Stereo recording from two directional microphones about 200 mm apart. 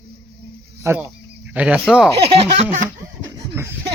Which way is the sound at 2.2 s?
30° right (ahead or behind).